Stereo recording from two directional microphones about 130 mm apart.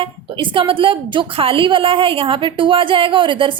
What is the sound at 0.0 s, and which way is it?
A woman's voice, 40° right (ahead or behind).